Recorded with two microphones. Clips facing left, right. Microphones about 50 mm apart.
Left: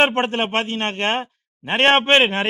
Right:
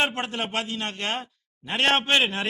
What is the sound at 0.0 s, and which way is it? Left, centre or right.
A man's voice, left.